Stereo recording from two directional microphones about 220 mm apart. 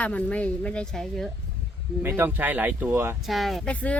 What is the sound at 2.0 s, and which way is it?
Speech, 10° right (ahead or behind).